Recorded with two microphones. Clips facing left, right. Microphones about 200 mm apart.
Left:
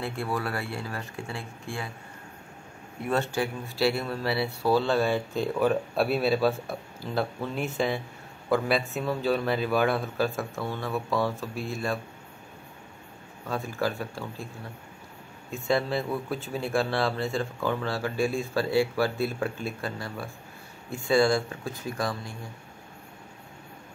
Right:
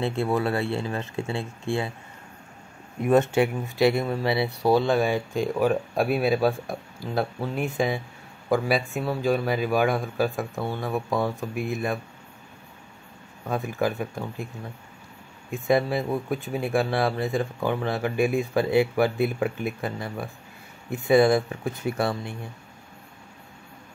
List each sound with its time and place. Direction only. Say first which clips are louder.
0.0 s speech: right 6 dB; 25° right (ahead or behind)
3.0 s speech: right 7 dB; 20° right (ahead or behind)
7.6 s speech: right 2 dB; 15° right (ahead or behind)
13.5 s speech: right 3 dB; 20° right (ahead or behind)
15.5 s speech: right 4 dB; 15° right (ahead or behind)